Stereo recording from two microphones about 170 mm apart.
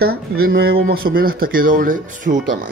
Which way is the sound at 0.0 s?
65° right (ahead or behind).